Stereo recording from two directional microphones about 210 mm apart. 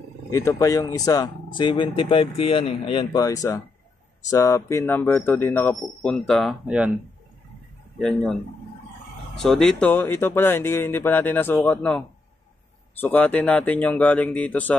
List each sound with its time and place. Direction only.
0.3 s speech: 15° left (ahead or behind); by 6.9 s centre (ahead or behind)
8.0 s a man's voice: centre (ahead or behind)
9.4 s speech: centre (ahead or behind)